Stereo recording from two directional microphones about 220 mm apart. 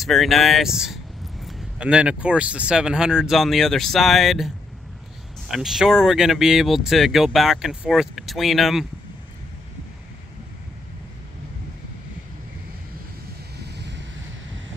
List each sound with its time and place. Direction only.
0.0 s speech: centre (ahead or behind)
5.5 s speech: centre (ahead or behind)
13.6 s vehicle: 50° right (ahead or behind)